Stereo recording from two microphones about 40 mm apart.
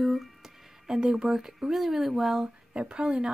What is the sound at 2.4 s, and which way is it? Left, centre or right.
Speech, right.